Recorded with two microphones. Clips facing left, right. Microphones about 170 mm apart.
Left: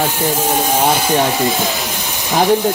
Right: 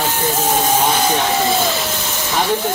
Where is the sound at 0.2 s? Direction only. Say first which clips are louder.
Left 1 dB; 10° left (ahead or behind).